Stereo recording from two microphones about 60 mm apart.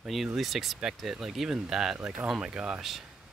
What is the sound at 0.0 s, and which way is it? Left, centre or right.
Speech, centre.